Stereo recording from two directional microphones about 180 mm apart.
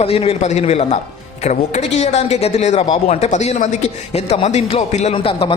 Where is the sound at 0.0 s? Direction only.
35° left (ahead or behind).